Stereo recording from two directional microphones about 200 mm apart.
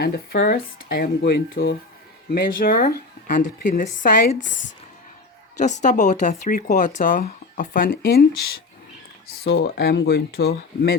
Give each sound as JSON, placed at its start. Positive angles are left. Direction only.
{"t": 0.0, "sound": "speech", "side_deg": 55}
{"t": 4.4, "sound": "speech", "side_deg": 65}
{"t": 5.5, "sound": "a woman's voice", "side_deg": 35}